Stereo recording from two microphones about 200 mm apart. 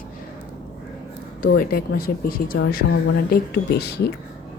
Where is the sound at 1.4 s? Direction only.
45° left (ahead or behind).